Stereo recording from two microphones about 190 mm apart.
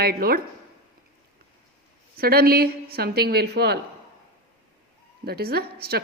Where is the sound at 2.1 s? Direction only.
55° right (ahead or behind).